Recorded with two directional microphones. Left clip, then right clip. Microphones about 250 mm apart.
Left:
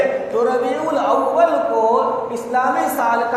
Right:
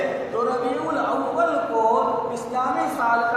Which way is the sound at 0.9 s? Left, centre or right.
Left.